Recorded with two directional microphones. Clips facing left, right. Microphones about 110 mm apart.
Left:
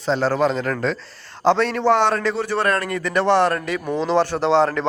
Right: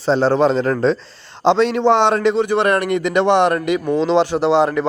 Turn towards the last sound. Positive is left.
turn(degrees=-10)  # may be behind; listen again after turning